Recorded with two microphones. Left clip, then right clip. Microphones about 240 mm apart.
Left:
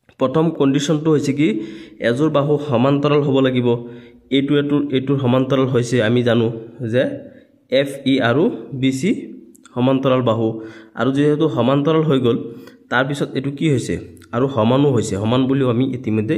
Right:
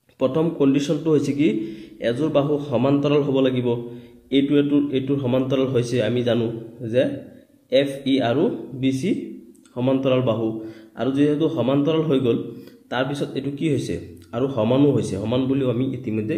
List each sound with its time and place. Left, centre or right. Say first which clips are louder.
0.2 s a man's voice: left 3 dB; left